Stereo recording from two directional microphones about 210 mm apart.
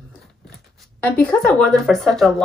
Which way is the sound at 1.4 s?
Centre (ahead or behind).